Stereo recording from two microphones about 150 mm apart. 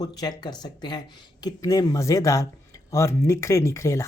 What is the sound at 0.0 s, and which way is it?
Speech, 25° left (ahead or behind).